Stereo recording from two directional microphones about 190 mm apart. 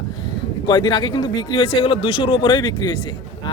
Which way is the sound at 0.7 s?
25° left (ahead or behind).